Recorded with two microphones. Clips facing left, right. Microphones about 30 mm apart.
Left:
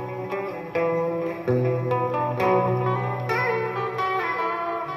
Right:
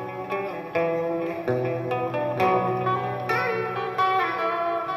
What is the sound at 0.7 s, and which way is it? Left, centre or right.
Music, centre.